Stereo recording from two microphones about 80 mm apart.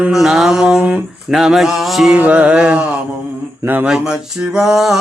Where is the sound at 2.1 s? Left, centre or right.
Centre.